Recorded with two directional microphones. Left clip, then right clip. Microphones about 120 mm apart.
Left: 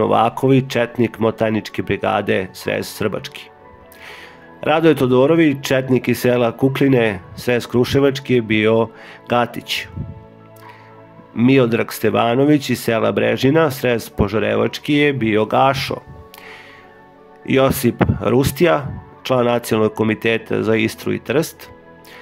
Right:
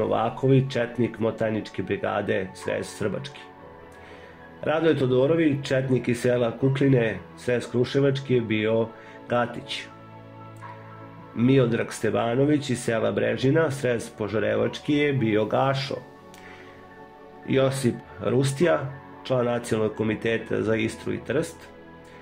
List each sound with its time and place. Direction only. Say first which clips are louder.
0.0 s speech: left 9 dB; 40° left (ahead or behind)
3.2 s speech: left 7 dB; 55° left (ahead or behind)
4.6 s speech: left 8 dB; 35° left (ahead or behind)
4.8 s speech: left 7 dB; 50° left (ahead or behind)
9.3 s speech: left 7 dB; 30° left (ahead or behind)
11.3 s speech: left 7 dB; 40° left (ahead or behind)
17.5 s speech: left 8 dB; 50° left (ahead or behind)